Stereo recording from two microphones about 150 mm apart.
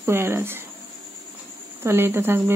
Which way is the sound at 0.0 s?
15° right (ahead or behind).